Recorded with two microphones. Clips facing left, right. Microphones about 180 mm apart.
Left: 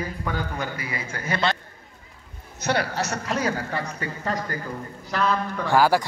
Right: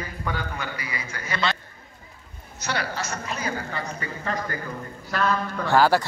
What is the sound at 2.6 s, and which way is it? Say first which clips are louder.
Speech: left 5 dB; 55° left (ahead or behind).